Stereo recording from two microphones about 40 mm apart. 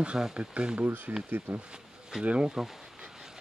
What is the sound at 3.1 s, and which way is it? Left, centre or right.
Vehicle, centre.